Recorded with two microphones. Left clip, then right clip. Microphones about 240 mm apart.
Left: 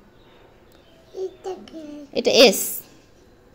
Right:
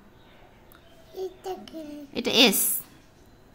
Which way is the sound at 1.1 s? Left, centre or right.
Right.